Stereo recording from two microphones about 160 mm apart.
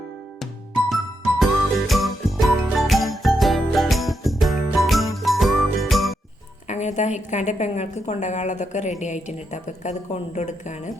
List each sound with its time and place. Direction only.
1.4 s music: centre (ahead or behind)
6.7 s a woman's voice: 45° left (ahead or behind)